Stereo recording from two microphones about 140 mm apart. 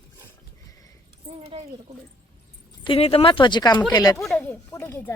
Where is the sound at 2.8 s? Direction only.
40° left (ahead or behind).